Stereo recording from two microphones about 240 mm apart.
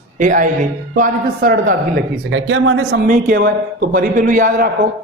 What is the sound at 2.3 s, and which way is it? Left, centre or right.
Speech, right.